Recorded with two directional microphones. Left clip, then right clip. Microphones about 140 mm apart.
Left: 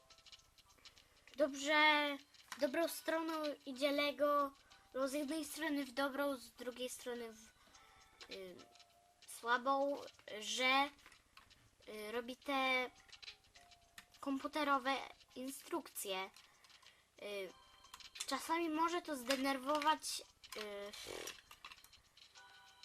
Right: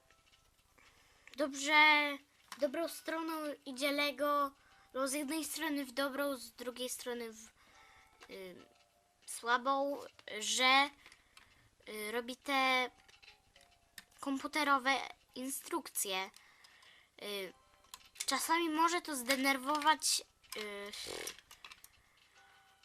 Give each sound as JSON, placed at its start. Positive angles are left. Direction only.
{"t": 1.2, "sound": "speech", "side_deg": -20}
{"t": 2.5, "sound": "a woman's voice", "side_deg": 5}
{"t": 14.2, "sound": "a woman's voice", "side_deg": -25}
{"t": 20.0, "sound": "a woman's voice", "side_deg": -25}